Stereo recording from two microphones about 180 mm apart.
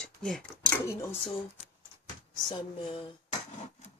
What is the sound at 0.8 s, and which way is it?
Speech, 15° left (ahead or behind).